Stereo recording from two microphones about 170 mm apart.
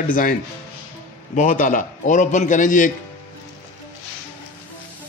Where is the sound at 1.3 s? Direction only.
50° left (ahead or behind).